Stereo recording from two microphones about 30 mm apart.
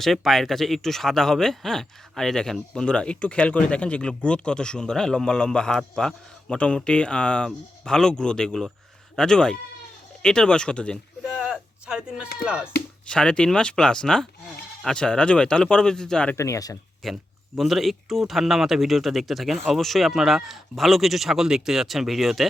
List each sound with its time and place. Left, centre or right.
0.0 s speech: centre
2.8 s speech: left
7.9 s speech: left
11.3 s a sound: right
11.9 s speech: right
13.1 s speech: left
17.0 s speech: centre
20.1 s speech: centre